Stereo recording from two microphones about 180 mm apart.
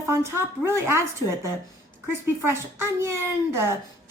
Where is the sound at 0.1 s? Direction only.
15° right (ahead or behind).